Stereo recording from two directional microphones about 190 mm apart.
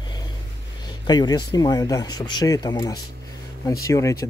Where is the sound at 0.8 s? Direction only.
20° left (ahead or behind).